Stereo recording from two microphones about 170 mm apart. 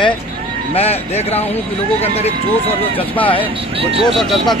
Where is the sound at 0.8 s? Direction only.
40° left (ahead or behind).